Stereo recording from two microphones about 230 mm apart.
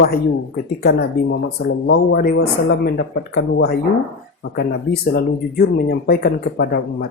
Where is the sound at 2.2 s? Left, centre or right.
Left.